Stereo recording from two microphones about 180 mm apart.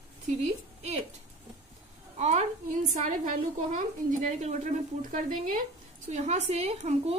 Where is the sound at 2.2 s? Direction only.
40° right (ahead or behind).